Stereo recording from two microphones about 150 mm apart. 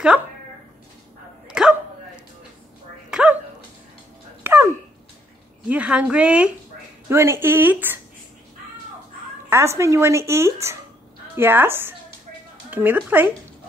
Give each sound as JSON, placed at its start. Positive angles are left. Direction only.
{"t": 1.5, "sound": "dog", "side_deg": -5}
{"t": 3.1, "sound": "bow-wow", "side_deg": -5}
{"t": 4.4, "sound": "dog", "side_deg": -15}
{"t": 5.7, "sound": "a woman's voice", "side_deg": -10}
{"t": 9.5, "sound": "speech", "side_deg": -15}